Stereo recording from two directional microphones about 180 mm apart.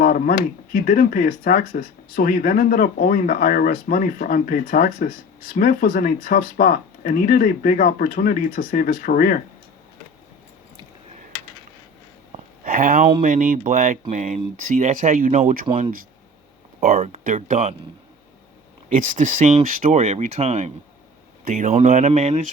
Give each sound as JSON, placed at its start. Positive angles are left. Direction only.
{"t": 0.0, "sound": "speech", "side_deg": 50}
{"t": 12.6, "sound": "speech", "side_deg": -50}
{"t": 15.6, "sound": "speech", "side_deg": -30}
{"t": 16.9, "sound": "speech", "side_deg": -35}
{"t": 17.2, "sound": "speech", "side_deg": -45}
{"t": 18.9, "sound": "speech", "side_deg": -45}